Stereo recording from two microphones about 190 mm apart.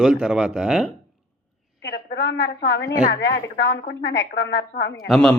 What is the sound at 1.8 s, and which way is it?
A woman's voice, 55° left (ahead or behind).